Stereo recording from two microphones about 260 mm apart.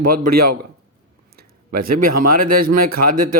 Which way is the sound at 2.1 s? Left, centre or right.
Right.